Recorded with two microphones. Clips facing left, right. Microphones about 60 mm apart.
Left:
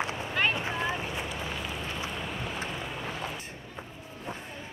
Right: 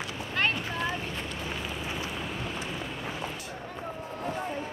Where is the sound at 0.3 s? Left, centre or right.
Centre.